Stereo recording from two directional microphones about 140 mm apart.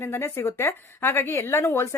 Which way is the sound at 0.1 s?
15° left (ahead or behind).